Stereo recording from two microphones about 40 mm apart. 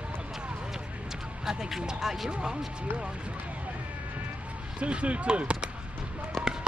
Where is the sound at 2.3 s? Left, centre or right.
Right.